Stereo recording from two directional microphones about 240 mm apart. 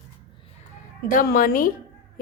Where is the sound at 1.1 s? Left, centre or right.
Left.